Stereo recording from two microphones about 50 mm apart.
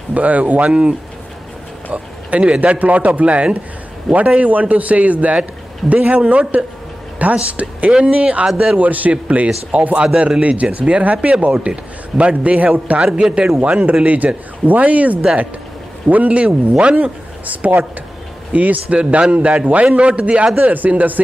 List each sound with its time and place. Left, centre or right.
0.1 s speech: right
4.1 s a man's voice: centre
4.4 s speech: right
7.9 s speech: centre
13.0 s speech: centre
20.5 s speech: right